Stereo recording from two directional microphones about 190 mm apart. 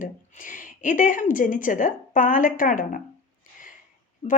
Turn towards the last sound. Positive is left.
turn(degrees=40)  # may be behind; listen again after turning